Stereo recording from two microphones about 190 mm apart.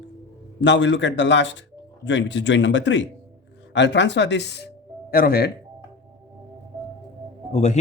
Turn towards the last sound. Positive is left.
turn(degrees=35)  # may be behind; listen again after turning